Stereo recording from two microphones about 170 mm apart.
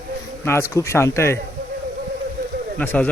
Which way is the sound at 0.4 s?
15° left (ahead or behind).